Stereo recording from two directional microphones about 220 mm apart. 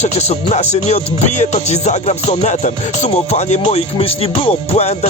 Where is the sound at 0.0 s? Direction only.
30° left (ahead or behind).